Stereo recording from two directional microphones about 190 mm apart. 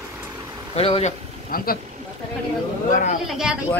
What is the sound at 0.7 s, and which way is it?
Speech, 30° left (ahead or behind).